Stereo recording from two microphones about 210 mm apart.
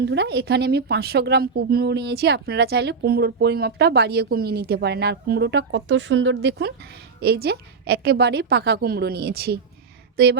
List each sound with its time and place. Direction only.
0.0 s a woman's voice: 55° right (ahead or behind)